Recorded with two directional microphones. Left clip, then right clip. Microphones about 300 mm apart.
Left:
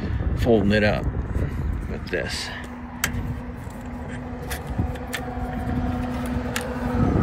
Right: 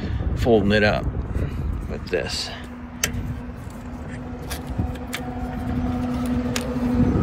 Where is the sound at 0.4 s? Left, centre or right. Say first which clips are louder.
Right 2 dB; centre.